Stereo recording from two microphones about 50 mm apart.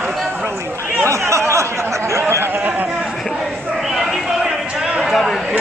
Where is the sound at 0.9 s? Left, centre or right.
Right.